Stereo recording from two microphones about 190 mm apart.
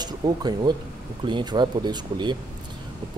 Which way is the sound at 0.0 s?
20° right (ahead or behind).